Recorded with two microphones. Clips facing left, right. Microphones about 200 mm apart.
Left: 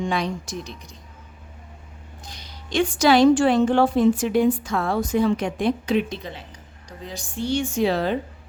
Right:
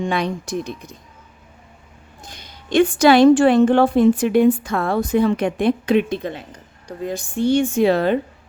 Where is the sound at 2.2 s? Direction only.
55° right (ahead or behind).